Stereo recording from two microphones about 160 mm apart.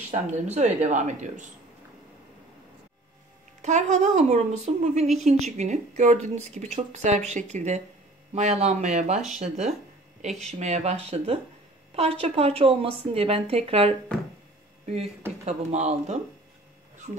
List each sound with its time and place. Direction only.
0.1 s speech: 45° right (ahead or behind)
3.6 s a woman's voice: 45° right (ahead or behind)
15.4 s speech: 45° right (ahead or behind)